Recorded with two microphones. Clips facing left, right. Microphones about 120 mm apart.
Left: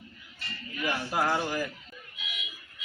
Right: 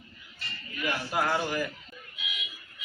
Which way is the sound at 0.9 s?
25° left (ahead or behind).